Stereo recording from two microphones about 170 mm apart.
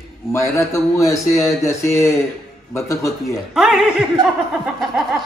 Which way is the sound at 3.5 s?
5° right (ahead or behind).